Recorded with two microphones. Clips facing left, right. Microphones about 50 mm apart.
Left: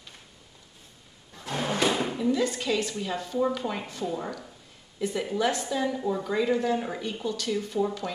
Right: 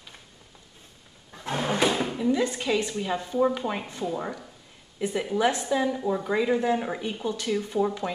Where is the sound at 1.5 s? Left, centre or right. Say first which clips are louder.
Right 2 dB; right.